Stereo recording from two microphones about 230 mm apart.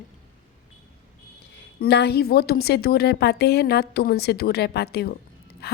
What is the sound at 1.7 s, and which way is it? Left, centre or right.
A woman's voice, left.